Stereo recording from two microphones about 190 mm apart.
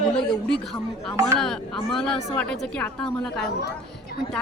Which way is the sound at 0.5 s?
5° left (ahead or behind).